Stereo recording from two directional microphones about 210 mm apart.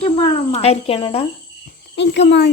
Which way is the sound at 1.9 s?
55° left (ahead or behind).